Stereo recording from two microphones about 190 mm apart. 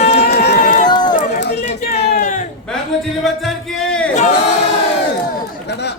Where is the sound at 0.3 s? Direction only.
50° left (ahead or behind).